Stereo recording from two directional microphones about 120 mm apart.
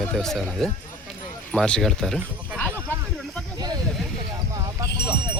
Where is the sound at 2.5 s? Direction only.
15° left (ahead or behind).